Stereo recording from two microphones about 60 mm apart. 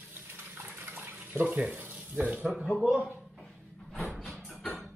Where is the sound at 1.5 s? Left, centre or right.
Right.